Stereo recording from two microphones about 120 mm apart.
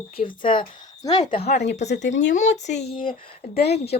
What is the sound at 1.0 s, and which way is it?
Speech, 35° left (ahead or behind).